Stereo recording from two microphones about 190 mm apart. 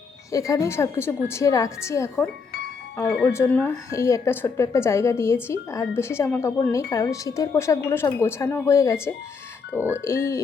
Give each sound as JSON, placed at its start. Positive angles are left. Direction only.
{"t": 0.3, "sound": "a woman's voice", "side_deg": 15}